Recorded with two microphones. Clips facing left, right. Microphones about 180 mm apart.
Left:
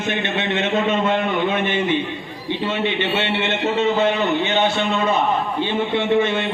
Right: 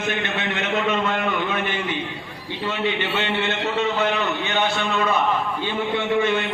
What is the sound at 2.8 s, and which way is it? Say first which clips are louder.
A man's voice: even; 25° left (ahead or behind).